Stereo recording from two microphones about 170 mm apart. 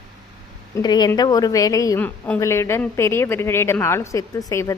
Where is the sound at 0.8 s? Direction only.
25° left (ahead or behind).